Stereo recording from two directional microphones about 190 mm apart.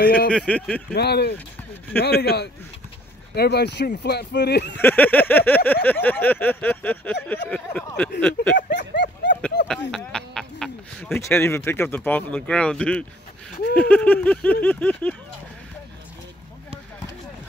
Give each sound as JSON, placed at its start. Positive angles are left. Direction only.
{"t": 0.0, "sound": "speech", "side_deg": 50}
{"t": 0.3, "sound": "speech", "side_deg": 5}
{"t": 0.9, "sound": "speech", "side_deg": 60}
{"t": 4.7, "sound": "speech", "side_deg": 10}
{"t": 8.7, "sound": "a sound", "side_deg": 65}
{"t": 9.8, "sound": "speech", "side_deg": 5}